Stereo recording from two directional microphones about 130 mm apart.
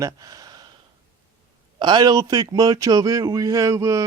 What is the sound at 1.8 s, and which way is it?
Speech, 35° right (ahead or behind).